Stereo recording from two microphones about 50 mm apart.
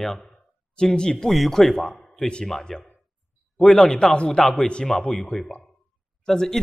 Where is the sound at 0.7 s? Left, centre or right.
Centre.